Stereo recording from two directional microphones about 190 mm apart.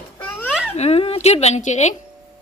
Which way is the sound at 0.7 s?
35° left (ahead or behind).